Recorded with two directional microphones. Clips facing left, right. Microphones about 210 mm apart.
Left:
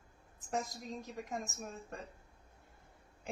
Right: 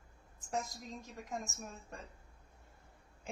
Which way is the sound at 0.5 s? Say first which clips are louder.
Left 1 dB; 20° left (ahead or behind).